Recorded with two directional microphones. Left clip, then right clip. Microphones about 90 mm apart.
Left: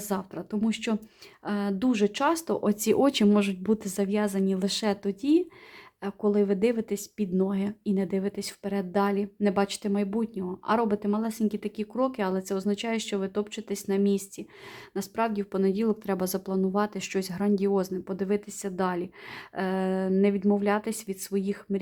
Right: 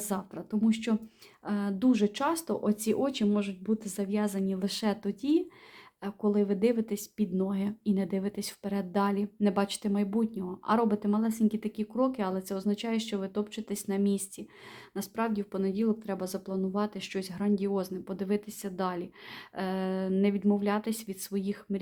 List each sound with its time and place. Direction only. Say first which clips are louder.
0.0 s a woman's voice: left 3 dB; 35° left (ahead or behind)
2.6 s speech: left 5 dB; 75° left (ahead or behind)
3.8 s a woman's voice: left 5 dB; 75° left (ahead or behind); by 21.8 s 35° left (ahead or behind)